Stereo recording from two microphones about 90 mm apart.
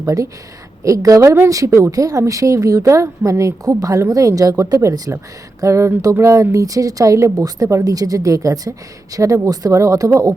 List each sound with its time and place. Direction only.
0.0 s speech: 40° right (ahead or behind)